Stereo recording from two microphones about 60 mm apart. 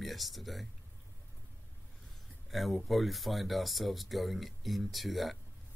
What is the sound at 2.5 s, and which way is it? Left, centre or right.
Speech, centre.